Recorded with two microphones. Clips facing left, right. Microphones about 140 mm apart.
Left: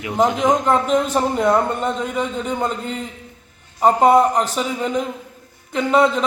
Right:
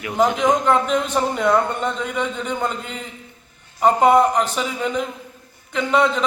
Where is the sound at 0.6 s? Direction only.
35° left (ahead or behind).